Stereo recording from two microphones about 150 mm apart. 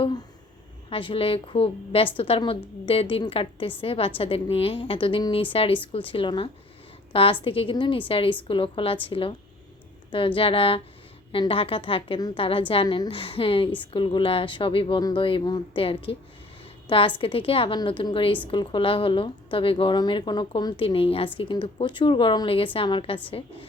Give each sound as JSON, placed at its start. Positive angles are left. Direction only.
{"t": 0.0, "sound": "a sound", "side_deg": 30}
{"t": 0.9, "sound": "a woman's voice", "side_deg": 35}
{"t": 17.2, "sound": "a woman's voice", "side_deg": 35}